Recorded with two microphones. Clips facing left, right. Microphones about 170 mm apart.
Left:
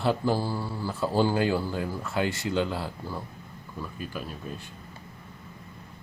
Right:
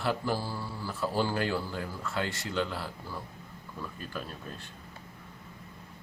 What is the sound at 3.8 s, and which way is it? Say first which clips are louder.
Speech: left 3 dB; 10° left (ahead or behind).